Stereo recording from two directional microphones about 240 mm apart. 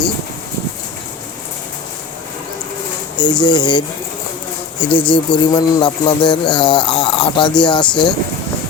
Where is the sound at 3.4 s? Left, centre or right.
Centre.